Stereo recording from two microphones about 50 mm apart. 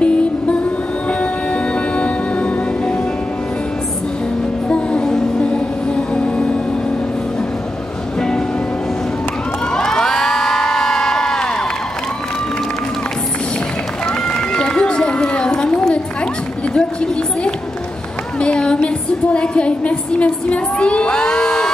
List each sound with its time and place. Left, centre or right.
0.0 s music: left
4.6 s music: left
9.8 s crowd: centre
14.0 s run: centre
16.7 s run: centre
18.4 s a sound: centre